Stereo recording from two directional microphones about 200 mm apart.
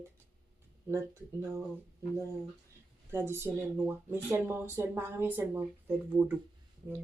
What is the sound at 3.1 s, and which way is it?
Speech, 10° right (ahead or behind).